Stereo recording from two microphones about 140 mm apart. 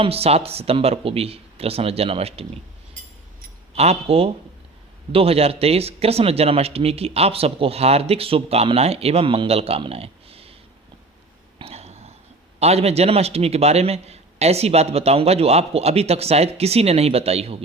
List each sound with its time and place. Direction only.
0.0 s speech: 45° right (ahead or behind)
3.8 s speech: 45° right (ahead or behind)
11.6 s a sound: 50° right (ahead or behind)
12.5 s speech: 50° right (ahead or behind)